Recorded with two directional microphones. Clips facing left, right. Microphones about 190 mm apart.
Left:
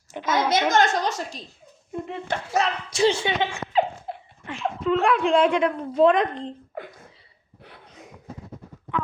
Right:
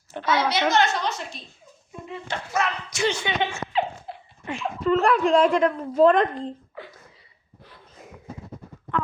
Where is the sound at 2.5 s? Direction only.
35° left (ahead or behind).